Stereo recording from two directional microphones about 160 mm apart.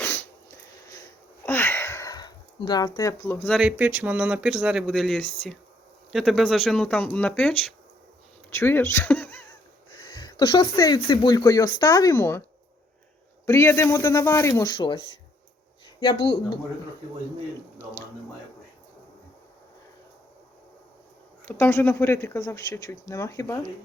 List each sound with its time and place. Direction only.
0.0 s sneeze: 10° left (ahead or behind)
1.5 s sniff: 15° left (ahead or behind)
3.6 s speech: 5° right (ahead or behind); by 9.2 s 15° left (ahead or behind)
10.2 s speech: 25° left (ahead or behind)
13.4 s speech: 15° left (ahead or behind); by 15.0 s 30° left (ahead or behind)
21.4 s speech: 15° left (ahead or behind)